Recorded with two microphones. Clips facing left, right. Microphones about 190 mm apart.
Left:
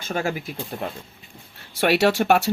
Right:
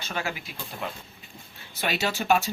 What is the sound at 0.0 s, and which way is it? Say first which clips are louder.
Speech: left 7 dB; 45° left (ahead or behind).